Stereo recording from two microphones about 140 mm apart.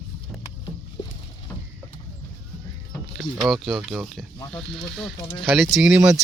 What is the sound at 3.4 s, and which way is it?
Speech, centre (ahead or behind).